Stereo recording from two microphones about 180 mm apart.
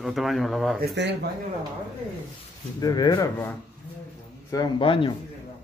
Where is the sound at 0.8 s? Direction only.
70° right (ahead or behind).